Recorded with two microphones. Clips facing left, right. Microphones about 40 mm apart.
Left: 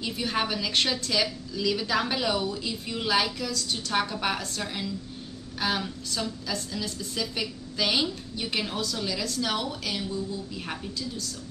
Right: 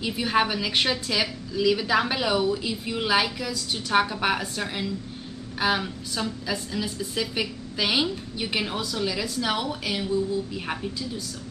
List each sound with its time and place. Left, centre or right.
0.0 s a woman's voice: centre